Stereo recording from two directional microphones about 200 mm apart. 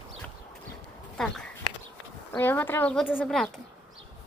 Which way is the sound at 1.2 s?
Centre (ahead or behind).